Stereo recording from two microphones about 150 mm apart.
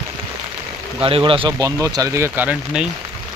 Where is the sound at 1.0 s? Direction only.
35° right (ahead or behind); by 2.8 s 10° right (ahead or behind).